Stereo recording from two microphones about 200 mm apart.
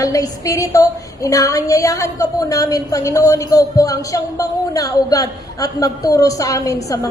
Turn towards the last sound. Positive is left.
turn(degrees=15)  # may be behind; listen again after turning